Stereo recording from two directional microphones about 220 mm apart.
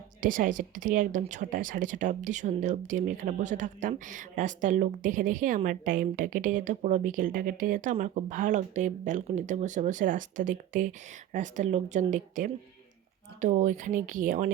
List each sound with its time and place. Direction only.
0.2 s speech: 40° right (ahead or behind)